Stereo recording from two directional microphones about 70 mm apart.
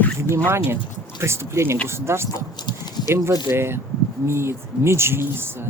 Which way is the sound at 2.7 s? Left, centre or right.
Left.